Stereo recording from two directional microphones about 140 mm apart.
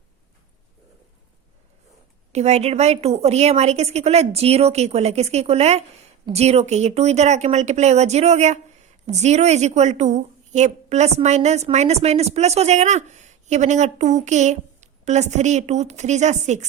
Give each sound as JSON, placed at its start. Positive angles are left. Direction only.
{"t": 2.3, "sound": "a woman's voice", "side_deg": -50}